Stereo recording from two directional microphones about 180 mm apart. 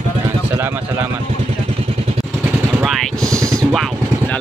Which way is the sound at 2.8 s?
Centre (ahead or behind).